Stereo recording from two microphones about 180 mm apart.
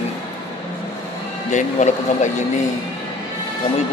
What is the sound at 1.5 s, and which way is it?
Speech, 40° left (ahead or behind).